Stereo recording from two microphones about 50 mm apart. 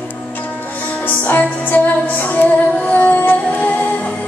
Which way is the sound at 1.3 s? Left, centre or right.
Left.